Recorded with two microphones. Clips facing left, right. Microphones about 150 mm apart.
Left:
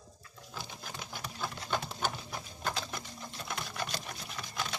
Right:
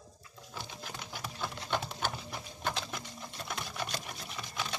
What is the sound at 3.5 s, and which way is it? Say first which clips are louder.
Sewing machine: even; centre (ahead or behind).